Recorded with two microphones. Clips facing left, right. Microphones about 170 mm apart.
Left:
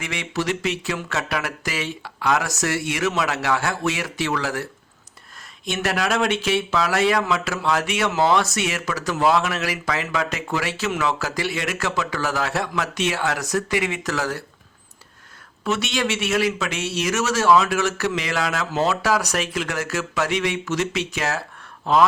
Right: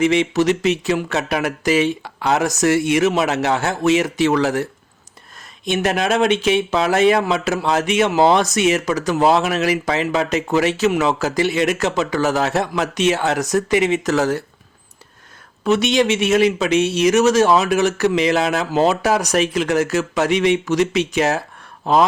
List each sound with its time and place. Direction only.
0.0 s a man's voice: 20° right (ahead or behind)
2.0 s speech: 35° right (ahead or behind)
2.4 s a man's voice: 20° right (ahead or behind)
5.6 s a man's voice: 20° right (ahead or behind)
15.6 s a man's voice: 20° right (ahead or behind)